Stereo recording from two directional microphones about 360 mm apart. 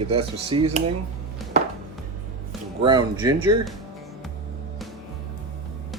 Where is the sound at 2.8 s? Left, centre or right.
Centre.